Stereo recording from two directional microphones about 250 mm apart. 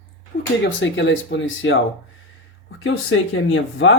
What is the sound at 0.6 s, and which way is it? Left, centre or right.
Speech, left.